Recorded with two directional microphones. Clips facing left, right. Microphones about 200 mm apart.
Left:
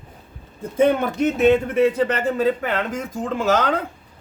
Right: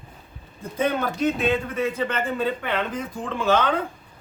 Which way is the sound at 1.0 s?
20° left (ahead or behind).